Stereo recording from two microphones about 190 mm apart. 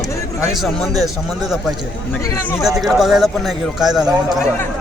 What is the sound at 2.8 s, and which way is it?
A man's voice, centre (ahead or behind).